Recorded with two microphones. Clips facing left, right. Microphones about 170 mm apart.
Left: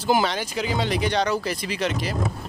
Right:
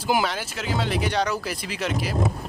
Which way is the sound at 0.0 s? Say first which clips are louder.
Left 2 dB; 10° right (ahead or behind).